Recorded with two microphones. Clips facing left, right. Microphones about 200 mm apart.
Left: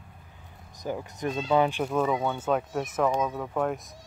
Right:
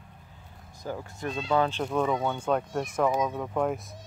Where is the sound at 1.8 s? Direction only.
5° left (ahead or behind).